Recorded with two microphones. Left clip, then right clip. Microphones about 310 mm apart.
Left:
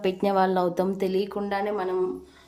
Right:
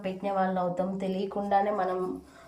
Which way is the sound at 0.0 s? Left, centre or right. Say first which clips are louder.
Left 6 dB; centre.